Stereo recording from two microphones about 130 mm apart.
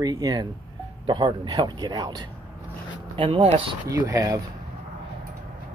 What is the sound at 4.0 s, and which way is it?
Speech, 25° right (ahead or behind).